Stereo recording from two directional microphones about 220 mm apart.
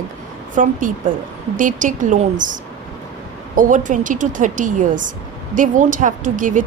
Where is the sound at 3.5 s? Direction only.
35° right (ahead or behind).